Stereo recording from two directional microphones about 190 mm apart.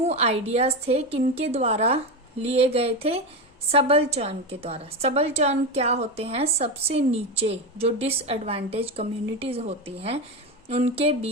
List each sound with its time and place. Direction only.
0.0 s a woman's voice: 35° right (ahead or behind)